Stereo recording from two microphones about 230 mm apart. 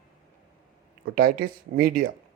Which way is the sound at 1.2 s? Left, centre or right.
Right.